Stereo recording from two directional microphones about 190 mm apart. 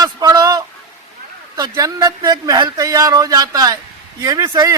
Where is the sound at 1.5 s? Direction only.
20° right (ahead or behind).